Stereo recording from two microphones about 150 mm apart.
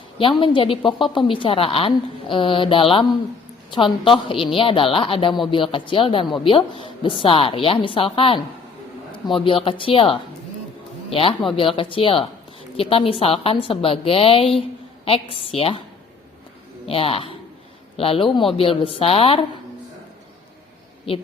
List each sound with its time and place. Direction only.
0.2 s a woman's voice: 35° left (ahead or behind)
16.8 s a woman's voice: 40° left (ahead or behind)